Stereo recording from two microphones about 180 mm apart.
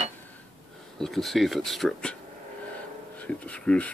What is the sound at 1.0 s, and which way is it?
Speech, centre (ahead or behind).